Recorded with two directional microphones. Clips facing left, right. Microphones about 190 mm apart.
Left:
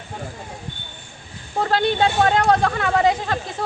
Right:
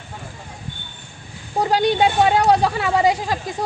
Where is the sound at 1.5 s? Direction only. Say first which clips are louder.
Right 2 dB; 15° right (ahead or behind).